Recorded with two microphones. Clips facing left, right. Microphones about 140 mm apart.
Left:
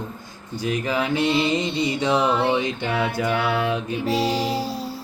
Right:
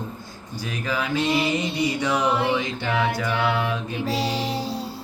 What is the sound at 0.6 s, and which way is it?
Music, 20° left (ahead or behind).